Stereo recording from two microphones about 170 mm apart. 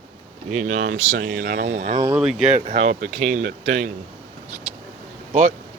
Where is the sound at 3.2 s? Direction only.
55° right (ahead or behind).